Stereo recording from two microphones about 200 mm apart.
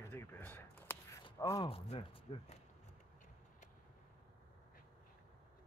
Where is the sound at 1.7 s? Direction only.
30° left (ahead or behind).